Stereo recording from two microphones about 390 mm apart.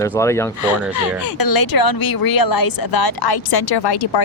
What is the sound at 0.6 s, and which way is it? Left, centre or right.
A woman's voice, left.